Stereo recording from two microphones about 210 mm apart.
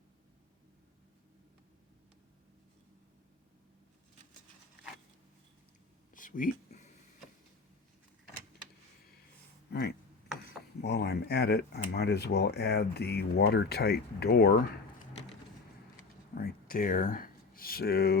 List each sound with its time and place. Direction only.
6.1 s a sound: 40° left (ahead or behind)
10.8 s speech: 50° left (ahead or behind)
16.3 s speech: 45° left (ahead or behind)